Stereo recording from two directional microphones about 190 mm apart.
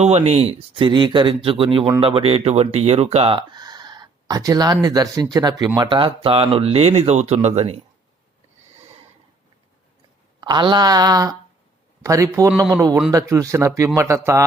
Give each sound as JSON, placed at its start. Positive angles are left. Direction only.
{"t": 0.0, "sound": "speech", "side_deg": -35}
{"t": 10.4, "sound": "speech", "side_deg": -25}